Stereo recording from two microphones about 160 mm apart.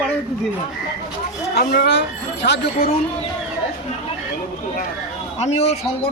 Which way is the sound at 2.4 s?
90° left.